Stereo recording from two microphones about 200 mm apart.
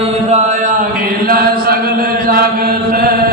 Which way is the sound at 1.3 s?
50° right (ahead or behind).